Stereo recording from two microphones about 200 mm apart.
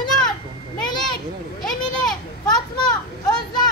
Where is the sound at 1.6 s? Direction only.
Centre (ahead or behind).